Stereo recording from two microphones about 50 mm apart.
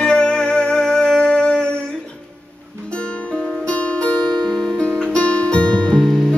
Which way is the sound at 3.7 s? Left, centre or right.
Left.